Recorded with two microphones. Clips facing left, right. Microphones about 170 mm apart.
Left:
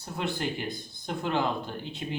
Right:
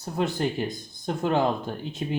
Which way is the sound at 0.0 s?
40° right (ahead or behind).